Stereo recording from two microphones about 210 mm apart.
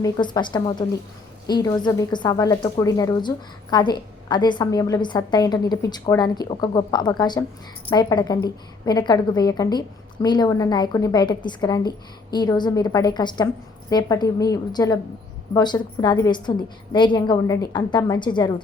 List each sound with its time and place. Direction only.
0.0 s a woman's voice: 20° left (ahead or behind)